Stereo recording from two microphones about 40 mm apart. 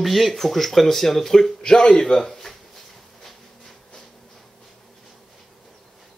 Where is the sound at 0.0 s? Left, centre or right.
Centre.